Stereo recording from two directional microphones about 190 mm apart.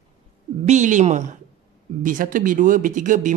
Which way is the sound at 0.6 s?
40° right (ahead or behind).